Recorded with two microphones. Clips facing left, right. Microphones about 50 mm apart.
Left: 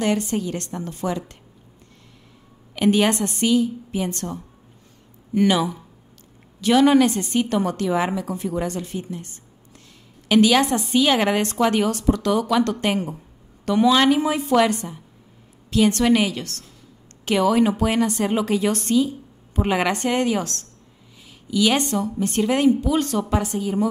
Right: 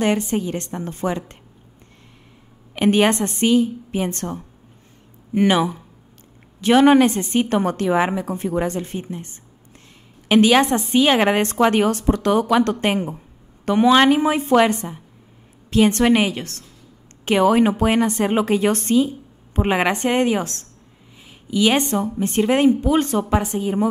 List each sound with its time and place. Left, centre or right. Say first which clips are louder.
0.0 s a woman's voice: right 2 dB; right
2.7 s a woman's voice: right 2 dB; right